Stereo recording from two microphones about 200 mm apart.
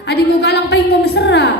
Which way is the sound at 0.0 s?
55° left (ahead or behind).